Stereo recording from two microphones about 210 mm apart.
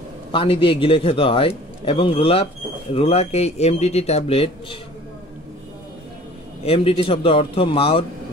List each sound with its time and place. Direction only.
0.3 s a man's voice: 25° left (ahead or behind)
6.6 s a man's voice: 30° left (ahead or behind)